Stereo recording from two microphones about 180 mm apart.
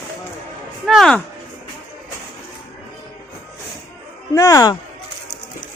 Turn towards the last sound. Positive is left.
turn(degrees=20)  # may be behind; listen again after turning